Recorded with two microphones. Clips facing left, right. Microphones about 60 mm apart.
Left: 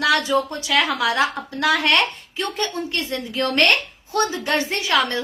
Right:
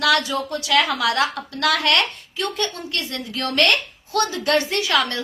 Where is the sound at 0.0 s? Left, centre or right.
Left.